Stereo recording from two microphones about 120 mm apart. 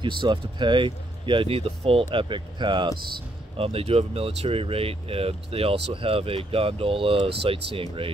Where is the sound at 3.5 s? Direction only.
55° right (ahead or behind).